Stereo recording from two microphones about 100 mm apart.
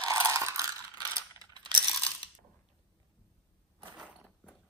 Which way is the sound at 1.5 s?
45° right (ahead or behind).